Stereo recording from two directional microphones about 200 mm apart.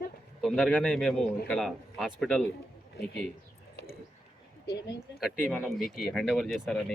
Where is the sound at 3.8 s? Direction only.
60° left (ahead or behind).